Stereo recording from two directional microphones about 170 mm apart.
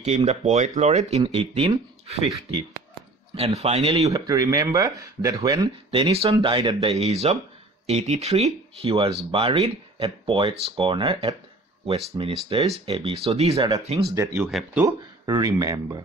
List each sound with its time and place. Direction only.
0.0 s speech: 40° right (ahead or behind)
3.3 s speech: 35° right (ahead or behind)
4.0 s speech: 20° right (ahead or behind)
5.9 s speech: 35° right (ahead or behind)
12.4 s speech: 35° right (ahead or behind)
13.6 s speech: 20° right (ahead or behind)
15.2 s speech: 20° right (ahead or behind)